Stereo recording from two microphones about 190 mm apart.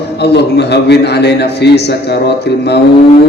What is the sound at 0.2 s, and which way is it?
A man's voice, 60° left (ahead or behind).